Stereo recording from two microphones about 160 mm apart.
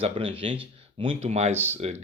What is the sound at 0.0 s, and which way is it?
Speech, 35° right (ahead or behind).